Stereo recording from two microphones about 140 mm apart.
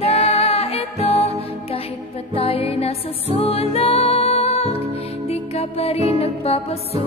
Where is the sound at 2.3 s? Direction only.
45° left (ahead or behind).